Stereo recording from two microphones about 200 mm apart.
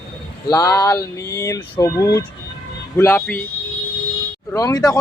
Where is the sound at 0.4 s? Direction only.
20° left (ahead or behind).